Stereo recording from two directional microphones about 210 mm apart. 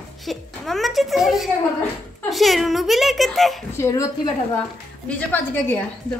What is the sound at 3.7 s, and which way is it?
A woman's voice, 15° left (ahead or behind).